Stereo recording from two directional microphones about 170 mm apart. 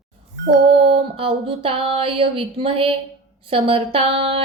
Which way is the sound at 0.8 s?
35° right (ahead or behind).